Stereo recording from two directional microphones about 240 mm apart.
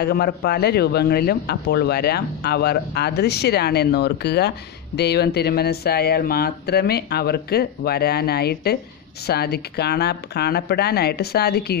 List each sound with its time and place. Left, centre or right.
0.0 s a man's voice: left